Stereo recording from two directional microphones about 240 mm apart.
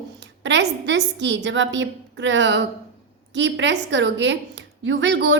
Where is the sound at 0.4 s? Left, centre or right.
Right.